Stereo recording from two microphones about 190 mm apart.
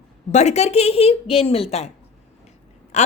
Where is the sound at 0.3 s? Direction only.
35° left (ahead or behind).